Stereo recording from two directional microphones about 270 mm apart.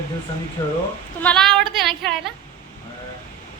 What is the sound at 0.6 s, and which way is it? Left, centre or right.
Speech, centre.